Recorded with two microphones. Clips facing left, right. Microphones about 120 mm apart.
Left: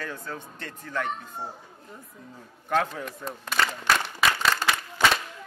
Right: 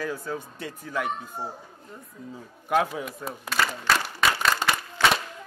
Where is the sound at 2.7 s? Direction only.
10° right (ahead or behind).